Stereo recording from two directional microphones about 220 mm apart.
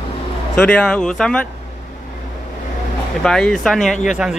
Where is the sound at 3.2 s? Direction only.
5° left (ahead or behind).